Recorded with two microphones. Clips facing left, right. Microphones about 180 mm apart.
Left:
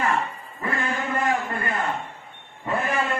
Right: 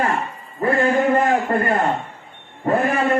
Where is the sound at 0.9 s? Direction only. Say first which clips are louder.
Right 8 dB; 45° right (ahead or behind).